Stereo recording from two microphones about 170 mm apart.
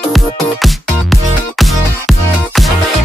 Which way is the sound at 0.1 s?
Centre (ahead or behind).